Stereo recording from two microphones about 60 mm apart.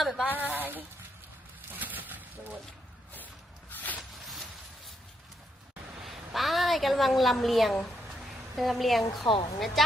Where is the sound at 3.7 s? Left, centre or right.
Left.